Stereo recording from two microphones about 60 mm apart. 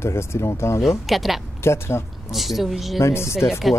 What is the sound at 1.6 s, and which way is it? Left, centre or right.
Speech, left.